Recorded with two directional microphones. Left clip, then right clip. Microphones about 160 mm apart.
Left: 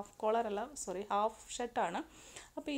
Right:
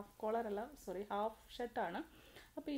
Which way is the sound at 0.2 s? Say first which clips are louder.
Left 6 dB; 20° left (ahead or behind).